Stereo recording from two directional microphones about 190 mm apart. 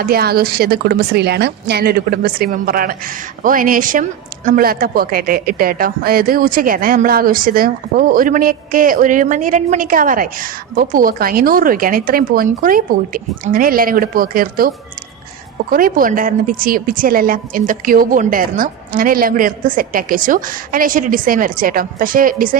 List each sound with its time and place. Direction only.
0.0 s a woman's voice: 55° right (ahead or behind)
15.7 s a woman's voice: 45° right (ahead or behind)